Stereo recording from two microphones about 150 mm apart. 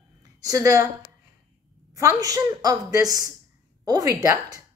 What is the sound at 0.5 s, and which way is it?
Speech, 25° right (ahead or behind).